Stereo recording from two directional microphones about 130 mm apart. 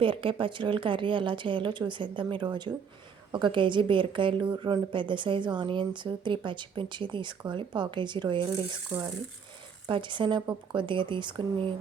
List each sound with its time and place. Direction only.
0.0 s speech: 40° right (ahead or behind)
9.8 s speech: 35° right (ahead or behind)